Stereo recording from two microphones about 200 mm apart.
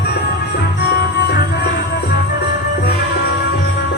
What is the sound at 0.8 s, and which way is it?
Music, 55° left (ahead or behind).